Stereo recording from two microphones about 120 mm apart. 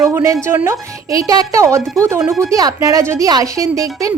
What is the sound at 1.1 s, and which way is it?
A woman's voice, 30° right (ahead or behind).